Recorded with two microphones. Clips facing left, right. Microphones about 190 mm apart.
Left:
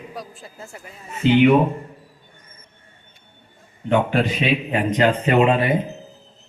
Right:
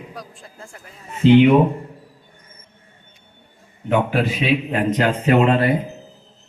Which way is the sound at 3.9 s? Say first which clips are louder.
Even; 5° right (ahead or behind).